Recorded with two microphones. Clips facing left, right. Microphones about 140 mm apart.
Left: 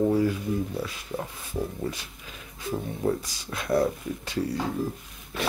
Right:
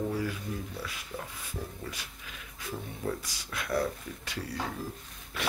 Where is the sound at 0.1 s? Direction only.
25° left (ahead or behind).